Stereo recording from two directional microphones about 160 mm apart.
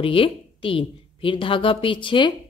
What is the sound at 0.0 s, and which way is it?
A woman's voice, 35° left (ahead or behind).